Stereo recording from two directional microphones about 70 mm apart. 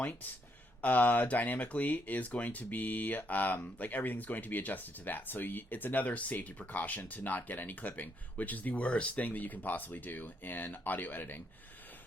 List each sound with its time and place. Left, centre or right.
0.0 s speech: left